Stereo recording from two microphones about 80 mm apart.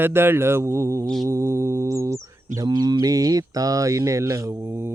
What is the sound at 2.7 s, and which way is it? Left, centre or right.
Speech, right.